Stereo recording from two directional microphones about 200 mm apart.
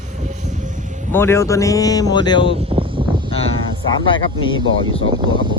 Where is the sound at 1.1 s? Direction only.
10° left (ahead or behind).